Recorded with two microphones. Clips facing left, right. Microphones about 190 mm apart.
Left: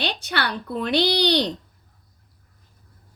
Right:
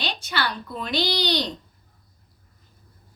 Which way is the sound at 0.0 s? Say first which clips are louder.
Left 2 dB; 60° left (ahead or behind).